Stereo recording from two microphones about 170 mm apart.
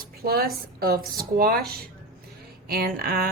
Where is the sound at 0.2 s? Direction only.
65° right (ahead or behind).